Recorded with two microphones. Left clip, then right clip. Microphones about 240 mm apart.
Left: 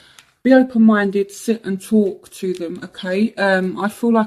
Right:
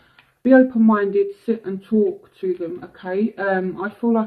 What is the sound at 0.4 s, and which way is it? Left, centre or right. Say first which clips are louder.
Speech: left 1 dB; left.